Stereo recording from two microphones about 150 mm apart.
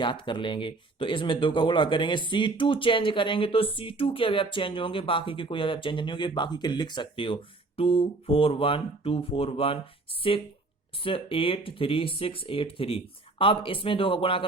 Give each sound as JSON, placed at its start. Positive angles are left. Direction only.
{"t": 0.0, "sound": "speech", "side_deg": 35}